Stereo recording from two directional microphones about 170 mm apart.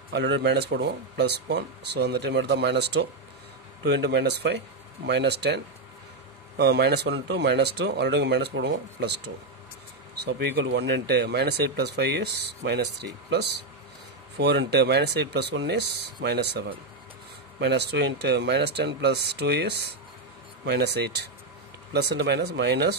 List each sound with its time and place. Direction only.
0.1 s speech: 85° right
6.6 s speech: 75° right (ahead or behind)